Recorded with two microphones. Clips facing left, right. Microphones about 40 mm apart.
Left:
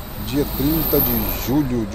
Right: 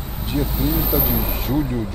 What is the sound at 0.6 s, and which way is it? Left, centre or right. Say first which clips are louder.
Speech: left 2 dB; right.